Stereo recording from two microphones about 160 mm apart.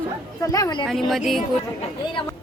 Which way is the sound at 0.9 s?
Centre (ahead or behind).